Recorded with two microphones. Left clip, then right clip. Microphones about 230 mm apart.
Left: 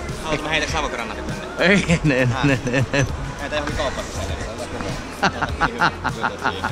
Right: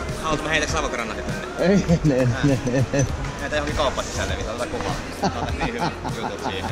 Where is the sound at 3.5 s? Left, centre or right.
Centre.